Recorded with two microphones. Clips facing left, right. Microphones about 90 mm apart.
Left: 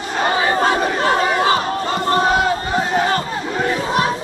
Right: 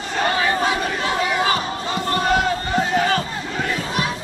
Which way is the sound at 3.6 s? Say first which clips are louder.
Left 6 dB; 40° left (ahead or behind).